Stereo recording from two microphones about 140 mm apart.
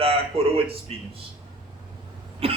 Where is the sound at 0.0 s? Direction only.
40° right (ahead or behind).